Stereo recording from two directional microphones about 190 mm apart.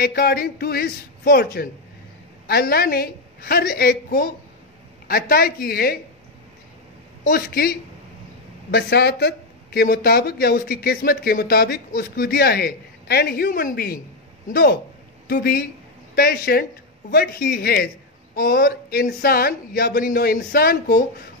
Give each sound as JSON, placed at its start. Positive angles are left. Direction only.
{"t": 0.0, "sound": "speech", "side_deg": 55}
{"t": 7.2, "sound": "speech", "side_deg": 55}
{"t": 8.7, "sound": "speech", "side_deg": 60}